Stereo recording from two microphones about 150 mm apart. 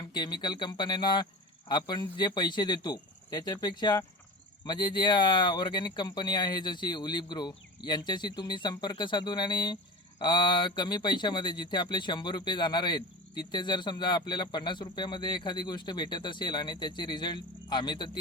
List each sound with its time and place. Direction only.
0.0 s a man's voice: 30° left (ahead or behind)